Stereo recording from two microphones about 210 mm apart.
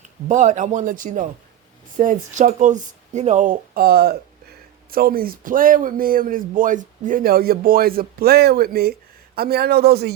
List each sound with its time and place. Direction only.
0.0 s a man's voice: 35° right (ahead or behind)